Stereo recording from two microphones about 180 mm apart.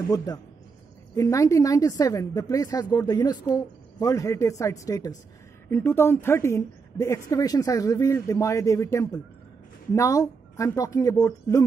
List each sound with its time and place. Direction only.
1.1 s a woman's voice: 15° left (ahead or behind)